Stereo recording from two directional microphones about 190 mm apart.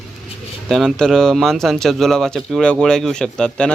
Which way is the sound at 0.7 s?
Centre (ahead or behind).